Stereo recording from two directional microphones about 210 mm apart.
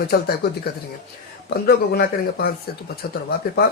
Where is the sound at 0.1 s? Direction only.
45° left (ahead or behind).